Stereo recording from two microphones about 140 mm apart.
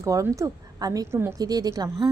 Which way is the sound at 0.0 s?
25° right (ahead or behind).